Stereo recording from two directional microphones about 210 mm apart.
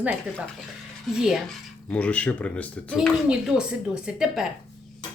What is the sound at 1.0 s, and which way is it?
Speech, centre (ahead or behind).